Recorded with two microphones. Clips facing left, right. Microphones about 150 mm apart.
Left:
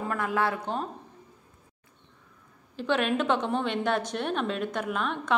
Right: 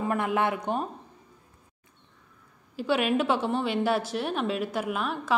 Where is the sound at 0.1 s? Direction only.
20° right (ahead or behind).